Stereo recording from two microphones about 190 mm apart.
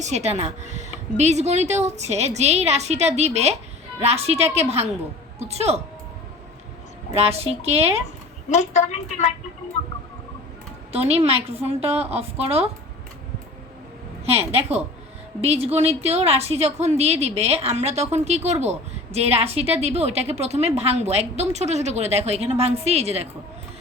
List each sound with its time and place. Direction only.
0.0 s a woman's voice: 35° right (ahead or behind)
7.1 s a woman's voice: 30° right (ahead or behind)
8.4 s a woman's voice: 40° left (ahead or behind)
10.9 s a woman's voice: 30° right (ahead or behind)
14.3 s a woman's voice: 35° right (ahead or behind)